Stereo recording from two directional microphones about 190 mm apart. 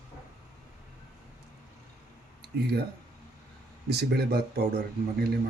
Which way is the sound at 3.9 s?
60° right (ahead or behind).